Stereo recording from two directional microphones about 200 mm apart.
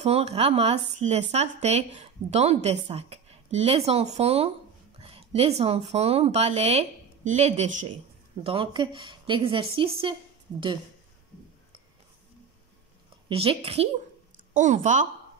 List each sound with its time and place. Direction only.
0.0 s speech: 30° right (ahead or behind)
8.5 s a woman's voice: 25° right (ahead or behind)
13.3 s a woman's voice: 30° right (ahead or behind)
14.3 s a woman's voice: 40° right (ahead or behind)